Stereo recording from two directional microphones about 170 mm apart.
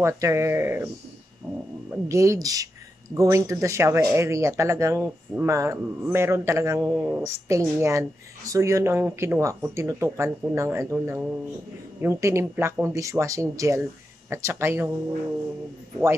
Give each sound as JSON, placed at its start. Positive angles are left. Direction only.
{"t": 0.0, "sound": "speech", "side_deg": -15}
{"t": 1.9, "sound": "speech", "side_deg": -20}